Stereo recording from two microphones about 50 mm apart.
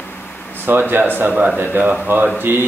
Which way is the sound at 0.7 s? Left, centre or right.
Right.